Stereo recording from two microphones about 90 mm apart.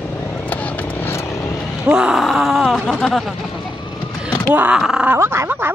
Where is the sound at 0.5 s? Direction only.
20° left (ahead or behind).